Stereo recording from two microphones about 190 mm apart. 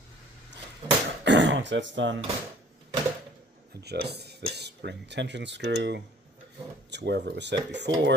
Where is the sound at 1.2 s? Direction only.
75° right (ahead or behind).